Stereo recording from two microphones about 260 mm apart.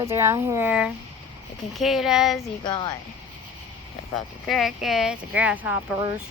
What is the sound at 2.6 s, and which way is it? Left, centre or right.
Speech, centre.